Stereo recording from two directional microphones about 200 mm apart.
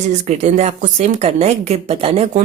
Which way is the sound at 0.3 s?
35° right (ahead or behind).